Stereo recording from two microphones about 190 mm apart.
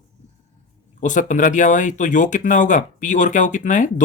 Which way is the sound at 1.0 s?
40° left (ahead or behind).